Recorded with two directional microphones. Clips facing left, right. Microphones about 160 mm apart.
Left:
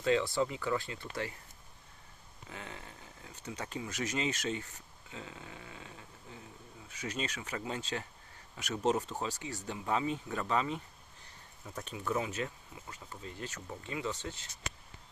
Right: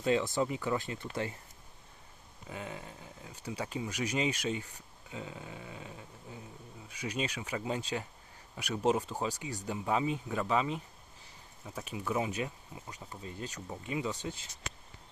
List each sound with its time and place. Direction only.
0.0 s speech: 20° right (ahead or behind)
2.5 s speech: 15° right (ahead or behind)